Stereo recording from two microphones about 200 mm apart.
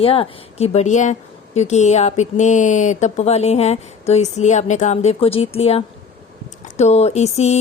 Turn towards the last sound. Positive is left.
turn(degrees=35)  # may be behind; listen again after turning